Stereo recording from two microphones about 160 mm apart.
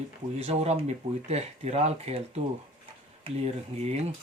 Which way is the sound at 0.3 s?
40° right (ahead or behind).